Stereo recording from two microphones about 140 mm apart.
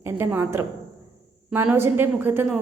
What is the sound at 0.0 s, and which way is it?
A woman's voice, 15° right (ahead or behind).